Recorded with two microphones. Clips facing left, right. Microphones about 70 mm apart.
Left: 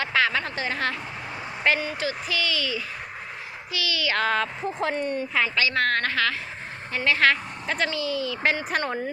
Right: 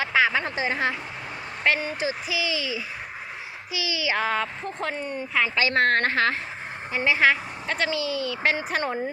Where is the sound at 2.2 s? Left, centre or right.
Centre.